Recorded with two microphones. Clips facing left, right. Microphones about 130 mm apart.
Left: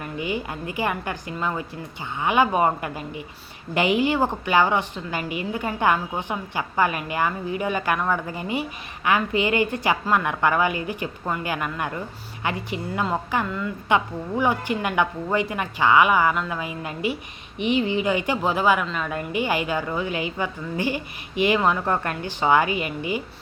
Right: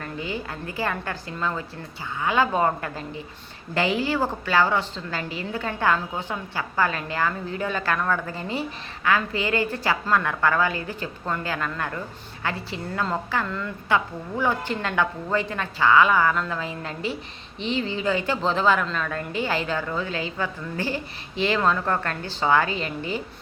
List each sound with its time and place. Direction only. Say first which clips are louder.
0.0 s a woman's voice: left 3 dB; 15° left (ahead or behind)